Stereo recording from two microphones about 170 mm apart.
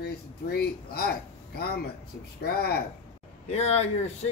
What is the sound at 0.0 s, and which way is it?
Speech, 70° left (ahead or behind).